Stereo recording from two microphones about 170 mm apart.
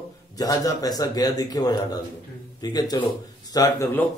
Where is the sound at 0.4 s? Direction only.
20° left (ahead or behind).